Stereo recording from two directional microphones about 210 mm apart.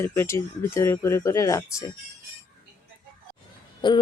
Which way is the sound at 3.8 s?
20° left (ahead or behind).